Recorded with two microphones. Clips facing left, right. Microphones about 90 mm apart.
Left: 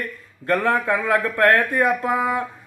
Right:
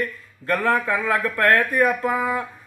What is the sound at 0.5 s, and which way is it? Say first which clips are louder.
Speech: left 1 dB; 20° left (ahead or behind).